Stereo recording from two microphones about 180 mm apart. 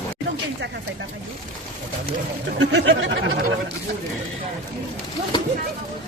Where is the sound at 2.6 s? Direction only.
80° right.